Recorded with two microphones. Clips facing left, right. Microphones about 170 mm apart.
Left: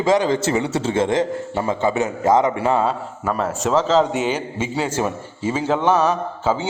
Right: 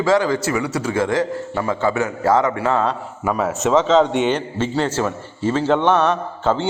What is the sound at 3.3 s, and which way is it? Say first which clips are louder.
A man's voice: right 2 dB; centre (ahead or behind).